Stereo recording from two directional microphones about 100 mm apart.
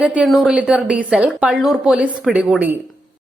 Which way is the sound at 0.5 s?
15° right (ahead or behind).